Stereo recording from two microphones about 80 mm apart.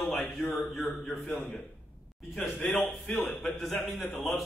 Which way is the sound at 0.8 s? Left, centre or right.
Centre.